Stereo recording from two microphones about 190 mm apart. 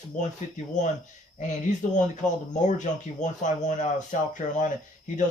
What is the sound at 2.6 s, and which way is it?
Speech, 40° left (ahead or behind).